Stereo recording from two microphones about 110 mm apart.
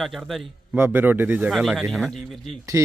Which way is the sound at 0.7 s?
20° right (ahead or behind).